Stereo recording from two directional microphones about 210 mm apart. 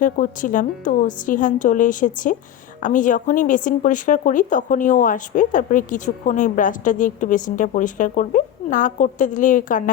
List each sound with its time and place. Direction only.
0.0 s speech: 40° left (ahead or behind)